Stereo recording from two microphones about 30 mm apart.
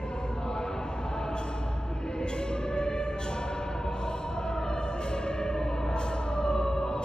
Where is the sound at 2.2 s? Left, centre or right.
Left.